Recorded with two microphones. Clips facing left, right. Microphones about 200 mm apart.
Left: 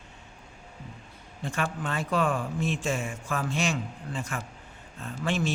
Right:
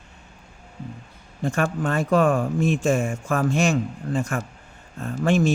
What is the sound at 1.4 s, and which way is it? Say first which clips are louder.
A man's voice: right 8 dB; 45° right (ahead or behind).